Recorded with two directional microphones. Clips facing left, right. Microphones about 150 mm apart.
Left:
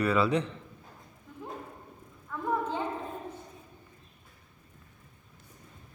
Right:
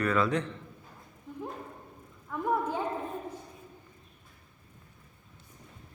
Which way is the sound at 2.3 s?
15° right (ahead or behind).